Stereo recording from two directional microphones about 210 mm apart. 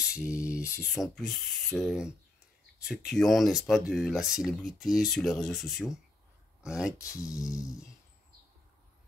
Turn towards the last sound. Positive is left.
turn(degrees=15)  # may be behind; listen again after turning